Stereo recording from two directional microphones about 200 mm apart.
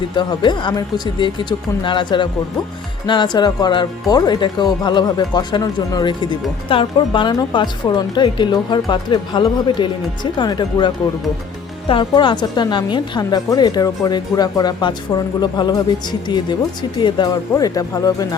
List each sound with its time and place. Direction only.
0.2 s a woman's voice: 25° left (ahead or behind)